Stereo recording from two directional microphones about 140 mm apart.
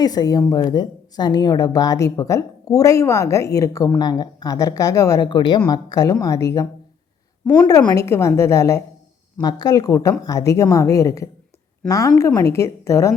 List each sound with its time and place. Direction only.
0.0 s speech: 30° left (ahead or behind)